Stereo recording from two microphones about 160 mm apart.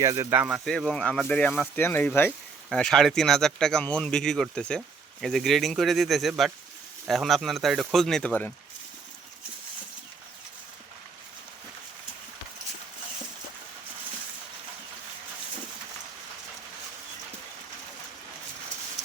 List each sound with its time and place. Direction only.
0.0 s speech: 20° right (ahead or behind)
0.3 s speech: 5° right (ahead or behind)